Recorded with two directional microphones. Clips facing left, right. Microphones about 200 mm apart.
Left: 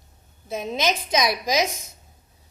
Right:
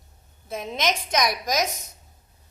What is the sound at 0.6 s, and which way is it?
A woman's voice, 5° left (ahead or behind).